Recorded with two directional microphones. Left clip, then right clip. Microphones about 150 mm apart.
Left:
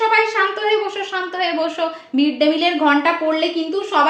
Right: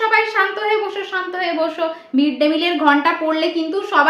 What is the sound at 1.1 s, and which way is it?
A woman's voice, 5° left (ahead or behind).